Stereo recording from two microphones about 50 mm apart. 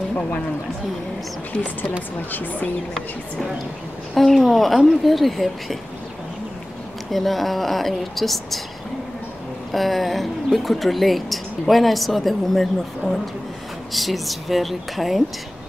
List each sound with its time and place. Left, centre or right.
2.3 s a woman's voice: left
4.1 s speech: centre
7.1 s speech: centre
9.7 s speech: centre